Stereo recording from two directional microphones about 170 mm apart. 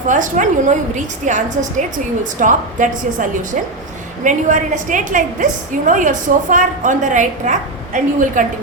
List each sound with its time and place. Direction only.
0.1 s a woman's voice: 50° right (ahead or behind)